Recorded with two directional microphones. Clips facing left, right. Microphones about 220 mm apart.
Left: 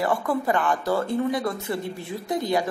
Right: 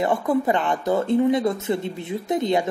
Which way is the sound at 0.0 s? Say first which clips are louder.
Right 3 dB; 20° right (ahead or behind).